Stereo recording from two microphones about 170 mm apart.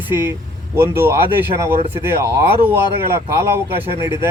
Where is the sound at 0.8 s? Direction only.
15° right (ahead or behind).